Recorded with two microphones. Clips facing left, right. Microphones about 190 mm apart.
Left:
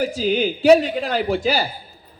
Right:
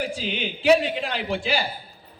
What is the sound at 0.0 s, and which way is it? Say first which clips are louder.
A man's voice: left 9 dB; 40° left (ahead or behind).